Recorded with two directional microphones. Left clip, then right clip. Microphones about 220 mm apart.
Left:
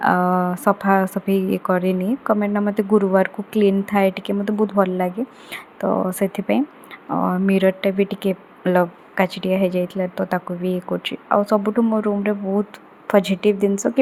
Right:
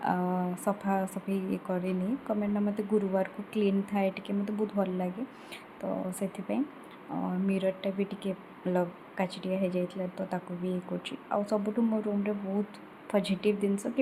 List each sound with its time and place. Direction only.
0.0 s a woman's voice: 25° left (ahead or behind)